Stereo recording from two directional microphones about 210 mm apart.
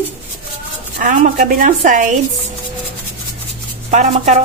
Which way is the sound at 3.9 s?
35° right (ahead or behind).